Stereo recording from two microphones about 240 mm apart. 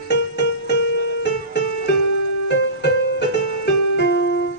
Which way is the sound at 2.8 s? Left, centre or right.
Left.